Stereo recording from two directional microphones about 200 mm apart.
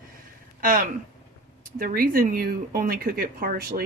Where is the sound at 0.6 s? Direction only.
45° right (ahead or behind).